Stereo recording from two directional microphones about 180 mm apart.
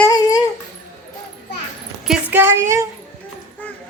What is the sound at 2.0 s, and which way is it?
Speech, 5° right (ahead or behind).